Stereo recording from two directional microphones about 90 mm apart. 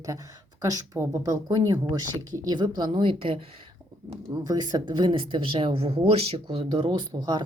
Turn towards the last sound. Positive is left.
turn(degrees=-55)  # may be behind; listen again after turning